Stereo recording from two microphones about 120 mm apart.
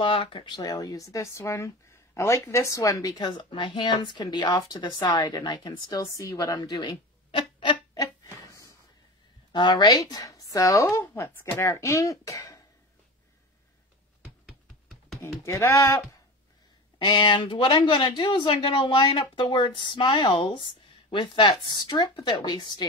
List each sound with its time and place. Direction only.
0.0 s speech: 45° left (ahead or behind)
7.9 s a sound: 30° left (ahead or behind)
9.5 s speech: 40° left (ahead or behind)
15.2 s speech: 25° left (ahead or behind)
17.0 s speech: 40° left (ahead or behind)